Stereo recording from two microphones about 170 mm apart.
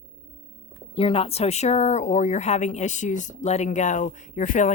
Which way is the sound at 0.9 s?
35° left (ahead or behind).